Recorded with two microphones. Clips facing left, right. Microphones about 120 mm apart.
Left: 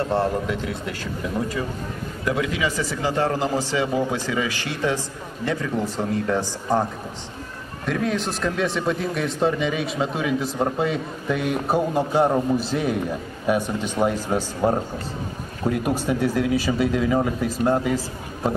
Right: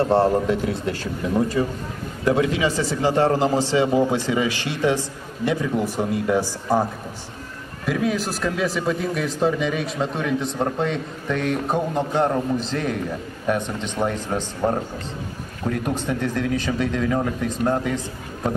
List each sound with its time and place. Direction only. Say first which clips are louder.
0.0 s a man's voice: right 5 dB; 30° right (ahead or behind); by 6.4 s 15° right (ahead or behind)
7.8 s speech: right 1 dB; 5° right (ahead or behind)